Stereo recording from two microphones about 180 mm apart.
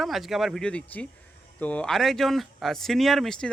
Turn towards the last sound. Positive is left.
turn(degrees=0)  # may be behind; listen again after turning